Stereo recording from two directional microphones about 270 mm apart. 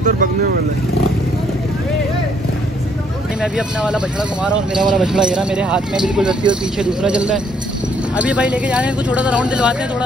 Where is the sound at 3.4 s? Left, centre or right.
Centre.